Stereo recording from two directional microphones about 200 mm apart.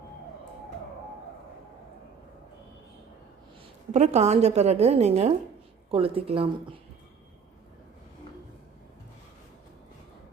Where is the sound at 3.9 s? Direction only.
35° right (ahead or behind).